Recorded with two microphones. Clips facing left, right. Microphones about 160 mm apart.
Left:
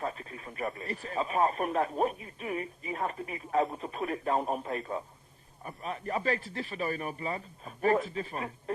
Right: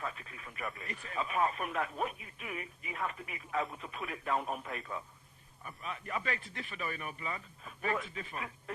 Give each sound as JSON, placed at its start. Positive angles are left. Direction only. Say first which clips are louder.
{"t": 0.0, "sound": "speech", "louder": "left 6 dB", "side_deg": 35}